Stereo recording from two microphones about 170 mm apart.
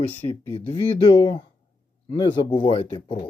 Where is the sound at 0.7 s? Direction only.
35° left (ahead or behind).